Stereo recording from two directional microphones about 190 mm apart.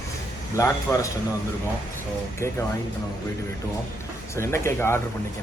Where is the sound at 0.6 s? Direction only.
15° left (ahead or behind).